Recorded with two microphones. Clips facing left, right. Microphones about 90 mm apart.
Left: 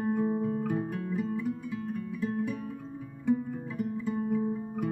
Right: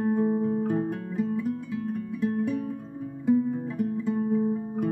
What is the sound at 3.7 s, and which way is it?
Guitar, 40° right (ahead or behind).